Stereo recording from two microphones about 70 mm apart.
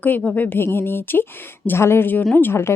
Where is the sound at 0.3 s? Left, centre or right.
Left.